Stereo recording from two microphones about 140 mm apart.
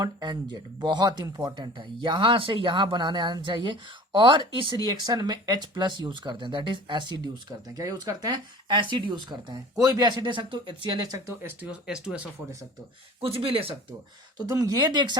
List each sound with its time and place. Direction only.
0.0 s speech: 30° right (ahead or behind)
11.4 s speech: 10° right (ahead or behind)
13.2 s speech: 40° right (ahead or behind)
14.3 s speech: 25° right (ahead or behind)